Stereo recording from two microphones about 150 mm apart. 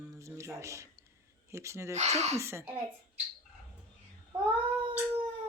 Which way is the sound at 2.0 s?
50° right (ahead or behind).